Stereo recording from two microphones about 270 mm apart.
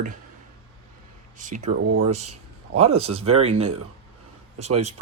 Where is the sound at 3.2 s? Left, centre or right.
Right.